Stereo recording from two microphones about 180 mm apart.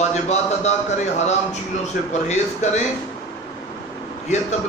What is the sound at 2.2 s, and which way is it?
Speech, 40° left (ahead or behind).